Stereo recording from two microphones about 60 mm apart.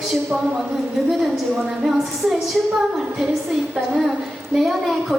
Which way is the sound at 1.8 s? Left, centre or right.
Centre.